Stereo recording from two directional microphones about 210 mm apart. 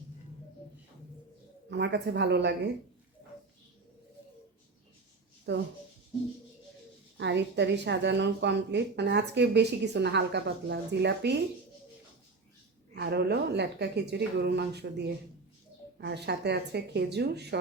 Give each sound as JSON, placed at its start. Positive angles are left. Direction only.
{"t": 1.7, "sound": "a woman's voice", "side_deg": -55}
{"t": 5.5, "sound": "a woman's voice", "side_deg": -55}
{"t": 7.2, "sound": "a woman's voice", "side_deg": -55}
{"t": 13.0, "sound": "speech", "side_deg": -50}